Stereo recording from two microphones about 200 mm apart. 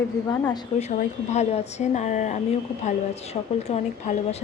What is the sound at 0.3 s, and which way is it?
Speech, 20° left (ahead or behind).